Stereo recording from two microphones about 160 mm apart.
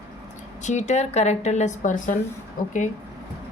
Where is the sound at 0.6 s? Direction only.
45° left (ahead or behind).